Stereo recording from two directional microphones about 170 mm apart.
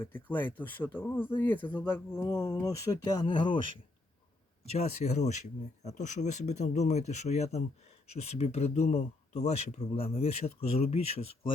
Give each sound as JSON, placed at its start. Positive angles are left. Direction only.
{"t": 0.0, "sound": "speech", "side_deg": 10}
{"t": 4.6, "sound": "speech", "side_deg": 40}